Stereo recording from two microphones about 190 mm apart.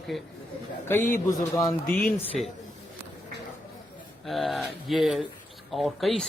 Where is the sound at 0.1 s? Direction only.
Centre (ahead or behind).